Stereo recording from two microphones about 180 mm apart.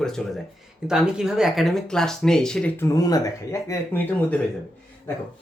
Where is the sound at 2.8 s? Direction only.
20° left (ahead or behind).